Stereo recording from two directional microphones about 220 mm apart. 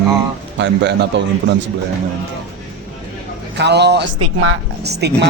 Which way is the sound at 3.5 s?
50° right (ahead or behind).